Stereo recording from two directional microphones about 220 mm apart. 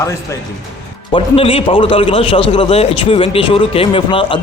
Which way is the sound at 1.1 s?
25° left (ahead or behind).